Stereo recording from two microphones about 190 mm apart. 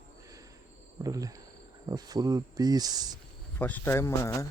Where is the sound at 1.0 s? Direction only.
20° right (ahead or behind).